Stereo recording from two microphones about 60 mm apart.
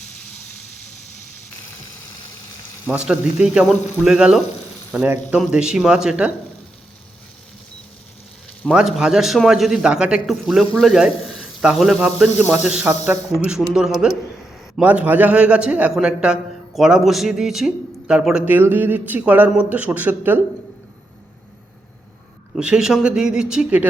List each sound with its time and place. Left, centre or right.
2.9 s speech: centre
8.7 s a man's voice: centre
9.8 s speech: centre
10.2 s a man's voice: centre
12.8 s speech: right
13.7 s speech: centre
14.8 s a man's voice: right; by 18.4 s centre
18.4 s speech: right
19.2 s speech: right
22.6 s speech: centre
23.6 s speech: right